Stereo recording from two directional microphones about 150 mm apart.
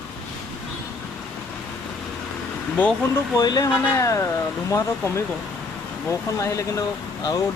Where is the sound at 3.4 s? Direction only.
25° left (ahead or behind).